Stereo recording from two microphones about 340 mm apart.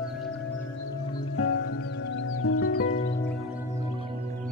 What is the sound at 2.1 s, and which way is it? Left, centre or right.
Music, left.